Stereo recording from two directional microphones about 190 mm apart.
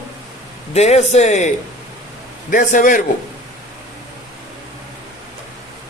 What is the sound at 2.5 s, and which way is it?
Speech, 40° left (ahead or behind).